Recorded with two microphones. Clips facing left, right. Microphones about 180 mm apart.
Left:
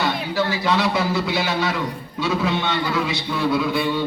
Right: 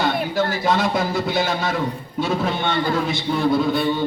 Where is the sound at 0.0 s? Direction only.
50° right (ahead or behind).